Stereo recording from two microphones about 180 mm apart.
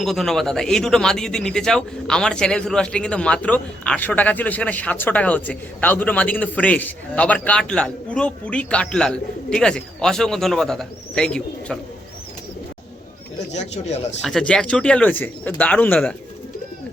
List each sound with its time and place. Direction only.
0.0 s speech: centre (ahead or behind)
13.5 s speech: 40° left (ahead or behind)
14.3 s speech: 5° left (ahead or behind)